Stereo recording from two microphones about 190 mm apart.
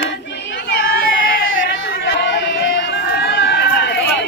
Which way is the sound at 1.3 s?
65° left (ahead or behind).